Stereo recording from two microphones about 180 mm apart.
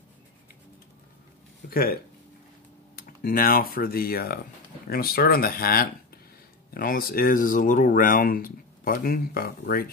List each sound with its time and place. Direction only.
1.7 s speech: 55° left (ahead or behind)
3.0 s speech: 50° left (ahead or behind)